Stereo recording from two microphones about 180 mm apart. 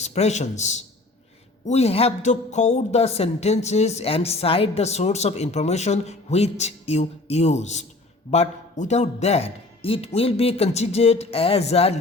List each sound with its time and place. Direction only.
0.0 s a man's voice: 40° left (ahead or behind)